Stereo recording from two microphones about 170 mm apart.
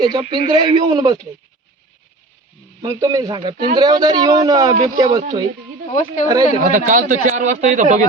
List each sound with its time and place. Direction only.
0.0 s a man's voice: 25° right (ahead or behind)
2.8 s a man's voice: 20° right (ahead or behind)
5.9 s speech: 50° left (ahead or behind)
6.2 s a man's voice: 25° right (ahead or behind)
6.6 s speech: 50° right (ahead or behind)